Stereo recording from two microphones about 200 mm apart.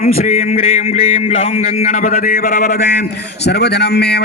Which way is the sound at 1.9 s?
45° left (ahead or behind).